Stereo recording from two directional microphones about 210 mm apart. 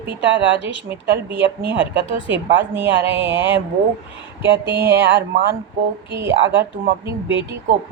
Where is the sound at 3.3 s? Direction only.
60° right (ahead or behind).